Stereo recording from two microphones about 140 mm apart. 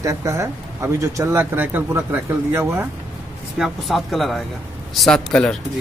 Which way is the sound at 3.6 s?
Centre (ahead or behind).